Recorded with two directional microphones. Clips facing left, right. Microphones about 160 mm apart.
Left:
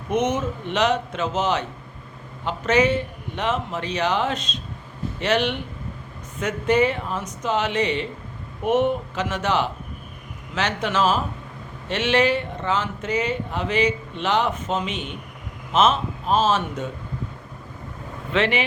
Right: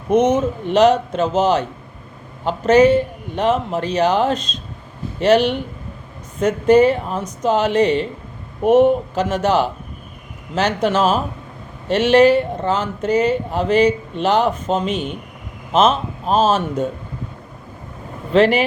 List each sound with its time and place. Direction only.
0.1 s speech: 35° right (ahead or behind)
18.3 s speech: 35° right (ahead or behind)